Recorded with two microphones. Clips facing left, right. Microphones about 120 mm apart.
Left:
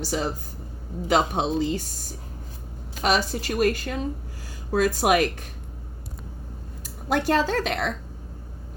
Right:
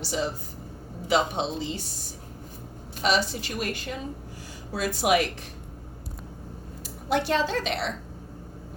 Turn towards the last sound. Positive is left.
turn(degrees=50)  # may be behind; listen again after turning